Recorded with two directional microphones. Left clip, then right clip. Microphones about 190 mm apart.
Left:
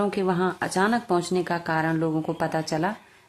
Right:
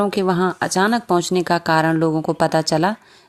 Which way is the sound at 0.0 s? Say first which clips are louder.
Right 6 dB; 35° right (ahead or behind).